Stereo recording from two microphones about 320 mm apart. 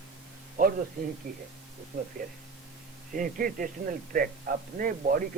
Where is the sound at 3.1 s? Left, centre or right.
Right.